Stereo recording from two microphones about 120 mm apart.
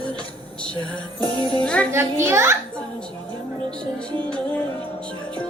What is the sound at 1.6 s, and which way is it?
Music, 10° left (ahead or behind).